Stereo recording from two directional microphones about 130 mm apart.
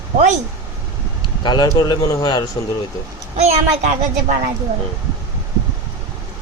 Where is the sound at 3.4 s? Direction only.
60° right (ahead or behind).